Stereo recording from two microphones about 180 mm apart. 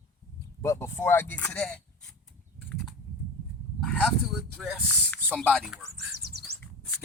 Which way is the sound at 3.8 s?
5° left (ahead or behind).